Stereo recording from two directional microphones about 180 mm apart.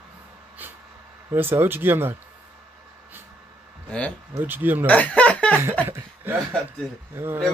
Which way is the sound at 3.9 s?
5° left (ahead or behind).